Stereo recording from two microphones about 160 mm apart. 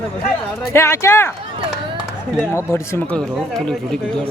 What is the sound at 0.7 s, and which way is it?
Speech, 15° left (ahead or behind).